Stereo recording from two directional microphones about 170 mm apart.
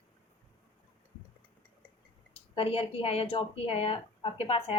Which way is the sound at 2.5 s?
35° left (ahead or behind).